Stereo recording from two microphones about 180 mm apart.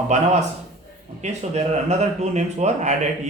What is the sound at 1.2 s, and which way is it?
Speech, 40° right (ahead or behind).